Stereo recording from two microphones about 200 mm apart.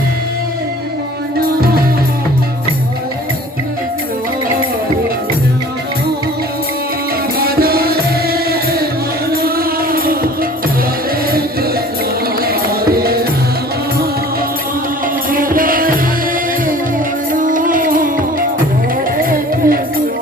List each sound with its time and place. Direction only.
7.3 s music: 50° right (ahead or behind)
12.4 s music: 50° right (ahead or behind)
15.3 s music: 45° right (ahead or behind)
17.3 s music: 40° right (ahead or behind)